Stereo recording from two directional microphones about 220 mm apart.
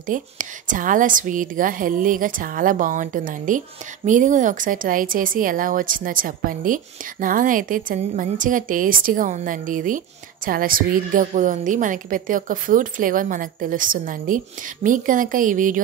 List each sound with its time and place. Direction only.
0.0 s a woman's voice: 35° right (ahead or behind)